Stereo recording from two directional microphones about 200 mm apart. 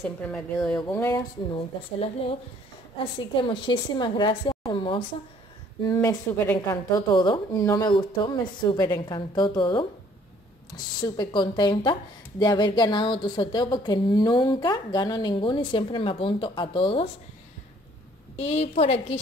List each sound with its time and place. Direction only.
0.0 s speech: 5° left (ahead or behind)
0.8 s a sound: 15° left (ahead or behind)
1.5 s speech: 25° left (ahead or behind)
5.9 s speech: 10° left (ahead or behind)
11.0 s speech: 20° left (ahead or behind)
18.3 s a woman's voice: 35° left (ahead or behind)